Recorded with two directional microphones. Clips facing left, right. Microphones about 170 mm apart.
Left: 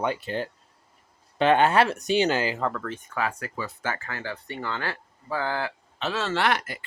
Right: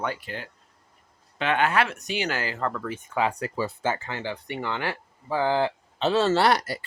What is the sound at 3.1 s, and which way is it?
Speech, 20° right (ahead or behind).